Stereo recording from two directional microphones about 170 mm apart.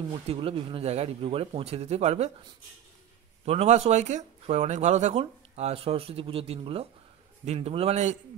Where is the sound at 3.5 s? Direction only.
40° right (ahead or behind).